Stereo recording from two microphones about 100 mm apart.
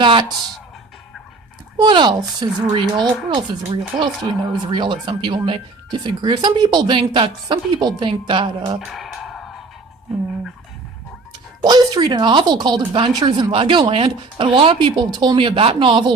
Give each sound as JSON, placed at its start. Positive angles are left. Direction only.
{"t": 0.0, "sound": "speech", "side_deg": -55}
{"t": 1.8, "sound": "speech", "side_deg": -50}
{"t": 8.8, "sound": "a sound", "side_deg": 0}
{"t": 11.6, "sound": "speech", "side_deg": -45}